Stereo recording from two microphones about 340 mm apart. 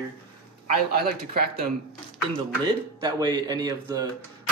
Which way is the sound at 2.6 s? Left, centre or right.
Centre.